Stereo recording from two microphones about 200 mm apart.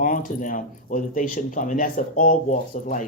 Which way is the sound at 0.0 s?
40° left (ahead or behind).